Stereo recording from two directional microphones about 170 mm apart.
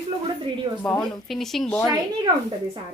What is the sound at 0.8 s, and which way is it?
A woman's voice, 5° left (ahead or behind).